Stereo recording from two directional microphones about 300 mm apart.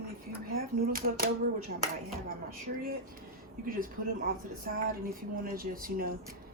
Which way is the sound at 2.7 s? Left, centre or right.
Right.